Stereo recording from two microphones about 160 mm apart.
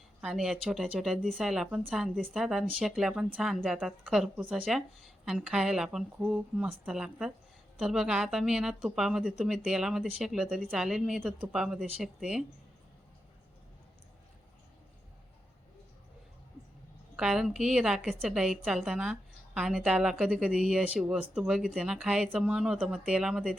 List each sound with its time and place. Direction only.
0.2 s a woman's voice: 5° right (ahead or behind)
17.2 s a woman's voice: 5° right (ahead or behind)